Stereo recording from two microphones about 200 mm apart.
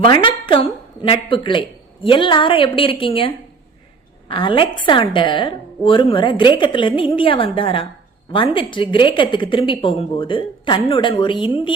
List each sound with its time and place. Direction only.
0.0 s a woman's voice: 25° left (ahead or behind)